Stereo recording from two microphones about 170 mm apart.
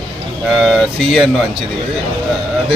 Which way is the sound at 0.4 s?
Centre (ahead or behind).